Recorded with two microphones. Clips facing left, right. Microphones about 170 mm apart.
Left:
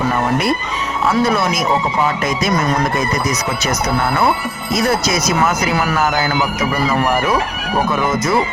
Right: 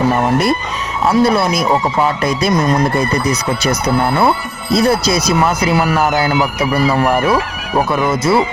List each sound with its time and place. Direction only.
1.2 s speech: 35° right (ahead or behind)
8.1 s speech: 30° right (ahead or behind)